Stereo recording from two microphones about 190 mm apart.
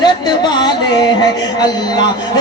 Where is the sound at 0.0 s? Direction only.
20° left (ahead or behind).